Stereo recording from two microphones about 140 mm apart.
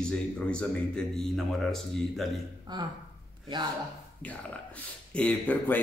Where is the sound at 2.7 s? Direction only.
30° right (ahead or behind).